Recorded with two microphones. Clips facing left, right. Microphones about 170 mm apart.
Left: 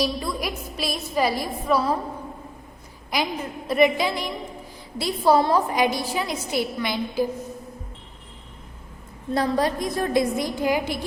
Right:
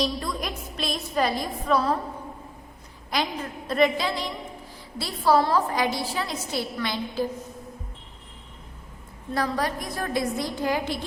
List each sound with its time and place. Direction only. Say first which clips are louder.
0.0 s a woman's voice: left 2 dB; 10° left (ahead or behind)
3.1 s a woman's voice: left 2 dB; 10° left (ahead or behind)
9.3 s a woman's voice: left 4 dB; 25° left (ahead or behind)